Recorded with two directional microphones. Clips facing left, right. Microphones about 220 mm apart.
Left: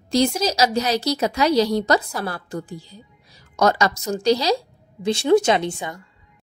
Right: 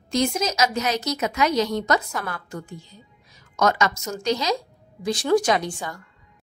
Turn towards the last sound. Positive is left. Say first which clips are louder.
# left 3 dB
turn(degrees=20)  # may be behind; listen again after turning